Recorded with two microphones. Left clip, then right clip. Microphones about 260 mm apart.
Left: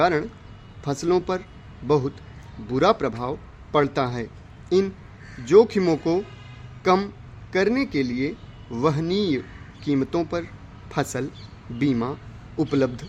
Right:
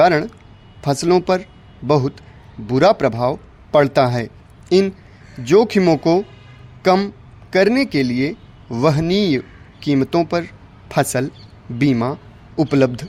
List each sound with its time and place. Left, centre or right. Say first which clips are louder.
0.0 s a man's voice: right 7 dB; right